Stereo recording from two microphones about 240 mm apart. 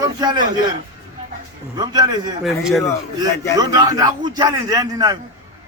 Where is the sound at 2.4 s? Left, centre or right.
Centre.